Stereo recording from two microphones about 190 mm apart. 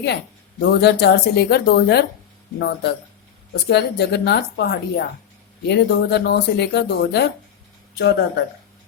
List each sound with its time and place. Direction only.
0.6 s speech: 60° left (ahead or behind)